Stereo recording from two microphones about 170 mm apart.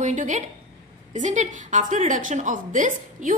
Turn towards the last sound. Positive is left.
turn(degrees=-50)  # may be behind; listen again after turning